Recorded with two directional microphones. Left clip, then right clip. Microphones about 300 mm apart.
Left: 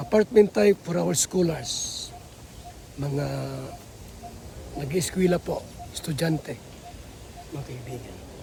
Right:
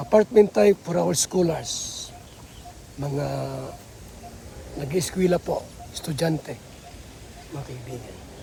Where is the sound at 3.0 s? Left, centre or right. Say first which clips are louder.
Right 2 dB; centre.